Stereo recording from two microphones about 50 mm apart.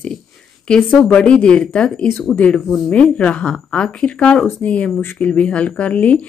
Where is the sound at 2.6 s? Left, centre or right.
Centre.